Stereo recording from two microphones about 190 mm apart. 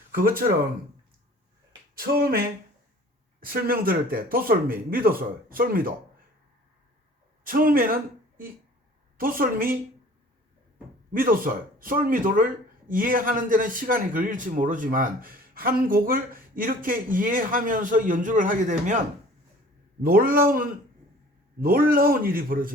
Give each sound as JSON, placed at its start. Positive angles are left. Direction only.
{"t": 0.1, "sound": "speech", "side_deg": -50}
{"t": 2.0, "sound": "a man's voice", "side_deg": -55}
{"t": 3.4, "sound": "a man's voice", "side_deg": -50}
{"t": 7.4, "sound": "a man's voice", "side_deg": -50}
{"t": 11.1, "sound": "a man's voice", "side_deg": -45}
{"t": 21.6, "sound": "a man's voice", "side_deg": -50}